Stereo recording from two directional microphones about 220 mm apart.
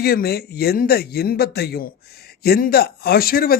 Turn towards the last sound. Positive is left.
turn(degrees=45)  # may be behind; listen again after turning